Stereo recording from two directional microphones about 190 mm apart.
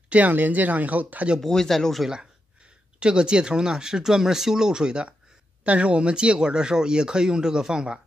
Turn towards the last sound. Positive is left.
turn(degrees=-5)  # may be behind; listen again after turning